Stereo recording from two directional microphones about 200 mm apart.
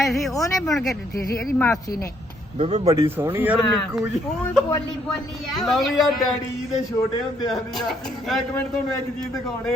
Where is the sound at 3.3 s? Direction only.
5° right (ahead or behind).